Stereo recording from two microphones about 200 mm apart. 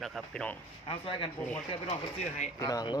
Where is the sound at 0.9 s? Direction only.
25° left (ahead or behind).